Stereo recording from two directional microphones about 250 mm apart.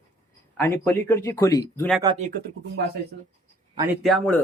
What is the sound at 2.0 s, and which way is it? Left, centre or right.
Speech, right.